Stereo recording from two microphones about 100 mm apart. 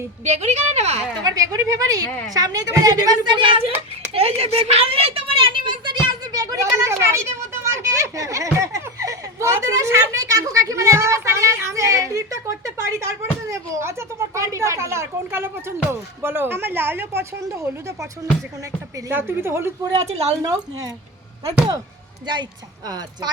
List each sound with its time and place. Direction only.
0.3 s speech: 90° right
1.2 s a woman's voice: 35° right (ahead or behind); by 3.7 s 60° right (ahead or behind)
4.1 s a woman's voice: 85° right; by 18.1 s 30° right (ahead or behind)
19.1 s speech: 25° right (ahead or behind)
20.1 s speech: 90° right
20.4 s a woman's voice: 35° right (ahead or behind)
22.9 s a woman's voice: 40° right (ahead or behind)